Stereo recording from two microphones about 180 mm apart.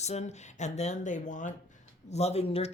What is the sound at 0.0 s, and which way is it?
Speech, 40° left (ahead or behind).